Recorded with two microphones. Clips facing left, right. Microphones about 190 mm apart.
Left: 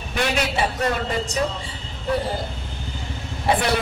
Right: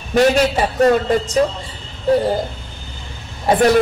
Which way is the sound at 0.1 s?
45° right (ahead or behind).